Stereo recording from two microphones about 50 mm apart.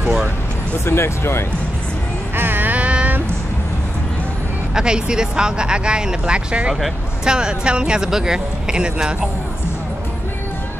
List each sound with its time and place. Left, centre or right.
0.8 s speech: left
2.3 s a sound: right
4.7 s speech: centre